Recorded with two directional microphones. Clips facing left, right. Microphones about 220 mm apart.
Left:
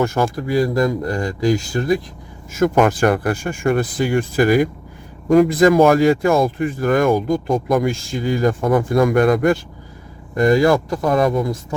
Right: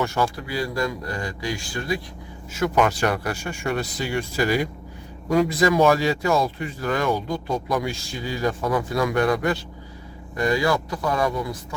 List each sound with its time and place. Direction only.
0.0 s speech: 45° left (ahead or behind)